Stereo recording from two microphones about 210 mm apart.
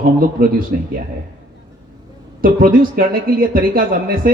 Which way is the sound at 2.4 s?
40° right (ahead or behind).